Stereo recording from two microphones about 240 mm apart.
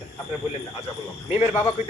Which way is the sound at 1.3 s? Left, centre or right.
Left.